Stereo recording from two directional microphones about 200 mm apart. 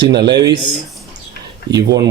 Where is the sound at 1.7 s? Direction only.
55° right (ahead or behind).